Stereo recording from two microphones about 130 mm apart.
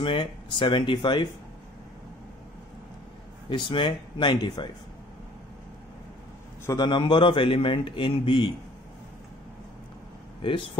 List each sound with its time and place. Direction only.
0.0 s a man's voice: 40° left (ahead or behind)
3.4 s a man's voice: 40° left (ahead or behind)
6.6 s a man's voice: 25° left (ahead or behind)
6.9 s a man's voice: 35° left (ahead or behind)